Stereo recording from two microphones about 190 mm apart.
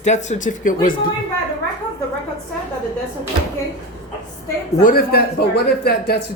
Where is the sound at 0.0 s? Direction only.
40° left (ahead or behind).